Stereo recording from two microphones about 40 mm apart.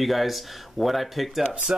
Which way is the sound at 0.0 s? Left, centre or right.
Centre.